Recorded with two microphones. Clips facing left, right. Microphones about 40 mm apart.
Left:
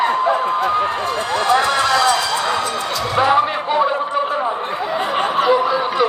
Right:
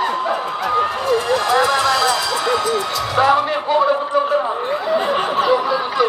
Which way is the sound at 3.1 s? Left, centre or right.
Left.